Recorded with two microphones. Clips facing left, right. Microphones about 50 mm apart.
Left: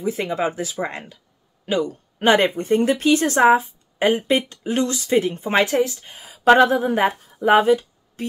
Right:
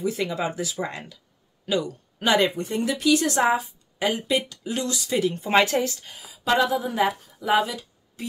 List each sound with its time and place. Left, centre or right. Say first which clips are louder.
0.0 s a woman's voice: left 3 dB; left
5.7 s speech: left 4 dB; centre
6.1 s speech: left 9 dB; left